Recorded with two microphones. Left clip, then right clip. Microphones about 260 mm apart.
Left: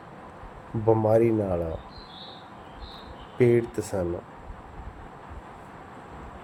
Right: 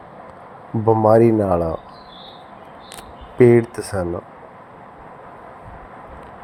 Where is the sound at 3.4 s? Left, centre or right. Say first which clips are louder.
Right 9 dB; centre.